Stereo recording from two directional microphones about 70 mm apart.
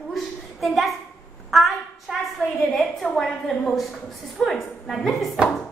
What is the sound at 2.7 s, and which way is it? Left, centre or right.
A woman's voice, centre.